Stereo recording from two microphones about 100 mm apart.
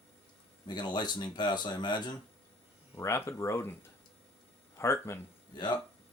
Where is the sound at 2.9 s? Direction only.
25° left (ahead or behind).